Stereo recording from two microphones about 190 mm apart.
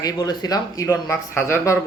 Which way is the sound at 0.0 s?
20° left (ahead or behind).